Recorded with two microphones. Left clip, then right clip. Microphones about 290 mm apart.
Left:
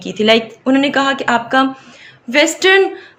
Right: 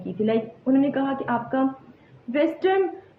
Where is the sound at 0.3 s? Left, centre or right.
Left.